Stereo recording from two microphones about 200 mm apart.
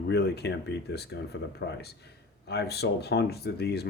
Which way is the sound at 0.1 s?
55° left (ahead or behind).